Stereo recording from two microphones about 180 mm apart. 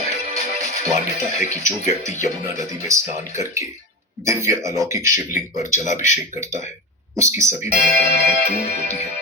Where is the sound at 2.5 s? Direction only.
15° right (ahead or behind).